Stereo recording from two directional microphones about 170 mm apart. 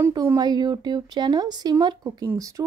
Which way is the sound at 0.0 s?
15° right (ahead or behind).